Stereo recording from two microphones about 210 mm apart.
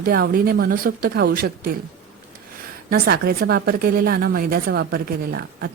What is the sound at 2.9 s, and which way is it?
A woman's voice, 45° right (ahead or behind).